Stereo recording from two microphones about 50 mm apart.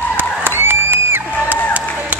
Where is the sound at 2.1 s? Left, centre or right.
Right.